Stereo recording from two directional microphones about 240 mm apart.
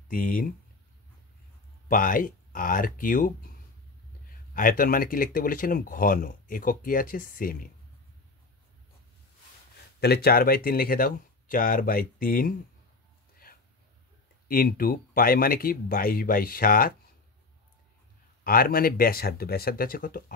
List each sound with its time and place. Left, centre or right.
0.1 s speech: left
1.9 s speech: left
4.6 s speech: left
9.9 s speech: left
14.5 s speech: left
18.4 s speech: left